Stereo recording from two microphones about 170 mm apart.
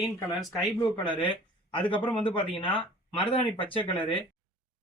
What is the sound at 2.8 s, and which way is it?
Speech, 30° left (ahead or behind).